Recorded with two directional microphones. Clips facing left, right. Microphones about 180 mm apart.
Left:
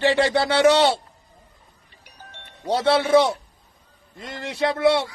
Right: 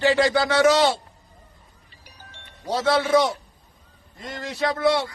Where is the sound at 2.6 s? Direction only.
30° left (ahead or behind).